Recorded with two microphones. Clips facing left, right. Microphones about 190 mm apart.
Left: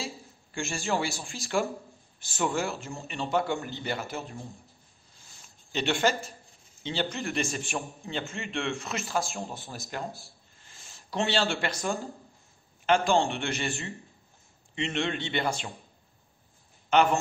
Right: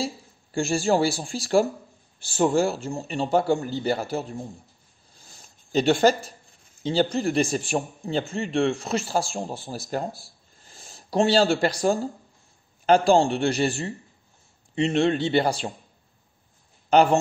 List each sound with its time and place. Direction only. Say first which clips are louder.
0.0 s a man's voice: right 8 dB; 35° right (ahead or behind)
5.7 s a man's voice: right 8 dB; 35° right (ahead or behind)
16.9 s a man's voice: right 5 dB; 35° right (ahead or behind)